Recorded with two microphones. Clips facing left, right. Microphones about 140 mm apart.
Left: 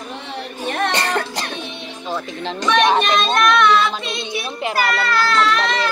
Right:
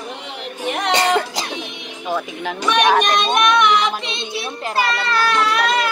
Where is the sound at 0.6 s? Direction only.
15° right (ahead or behind).